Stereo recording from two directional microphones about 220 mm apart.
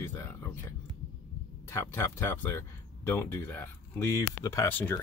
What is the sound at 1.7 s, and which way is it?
Speech, 10° left (ahead or behind).